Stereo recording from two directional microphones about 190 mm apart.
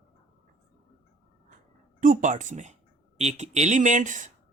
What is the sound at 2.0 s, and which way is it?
Speech, 45° right (ahead or behind).